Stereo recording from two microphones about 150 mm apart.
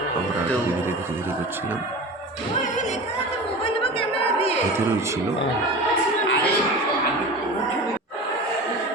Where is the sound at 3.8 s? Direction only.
40° left (ahead or behind).